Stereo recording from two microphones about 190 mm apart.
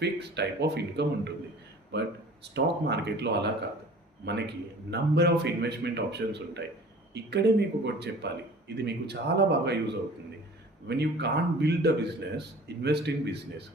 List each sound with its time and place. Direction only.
0.0 s speech: 60° right (ahead or behind)